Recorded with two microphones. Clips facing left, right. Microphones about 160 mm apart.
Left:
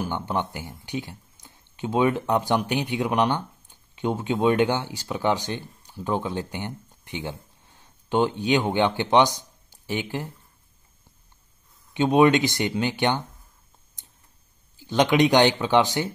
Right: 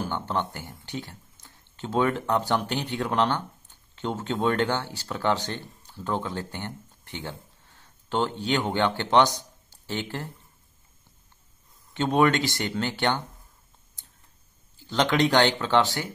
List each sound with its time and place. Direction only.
0.0 s speech: 15° left (ahead or behind)
11.9 s speech: 15° left (ahead or behind)
14.8 s speech: 15° left (ahead or behind)